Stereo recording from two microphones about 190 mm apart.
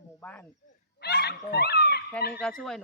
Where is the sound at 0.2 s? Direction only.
10° left (ahead or behind).